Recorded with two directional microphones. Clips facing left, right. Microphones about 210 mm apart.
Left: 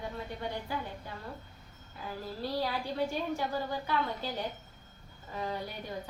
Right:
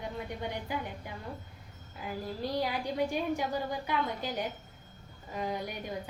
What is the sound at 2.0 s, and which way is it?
A woman's voice, 15° right (ahead or behind).